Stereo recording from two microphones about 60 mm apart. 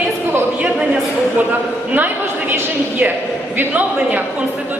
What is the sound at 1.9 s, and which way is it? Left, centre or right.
A man's voice, right.